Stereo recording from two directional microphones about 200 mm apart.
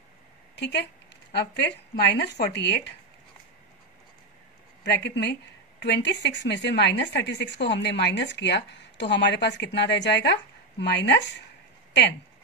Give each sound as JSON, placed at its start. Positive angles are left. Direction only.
{"t": 0.6, "sound": "speech", "side_deg": 60}
{"t": 4.8, "sound": "speech", "side_deg": 55}